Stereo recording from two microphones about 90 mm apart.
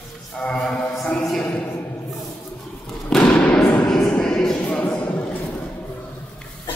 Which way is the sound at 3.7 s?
15° left (ahead or behind).